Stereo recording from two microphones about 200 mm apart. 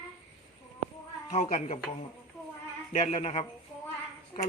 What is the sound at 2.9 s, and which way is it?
Speech, 35° left (ahead or behind).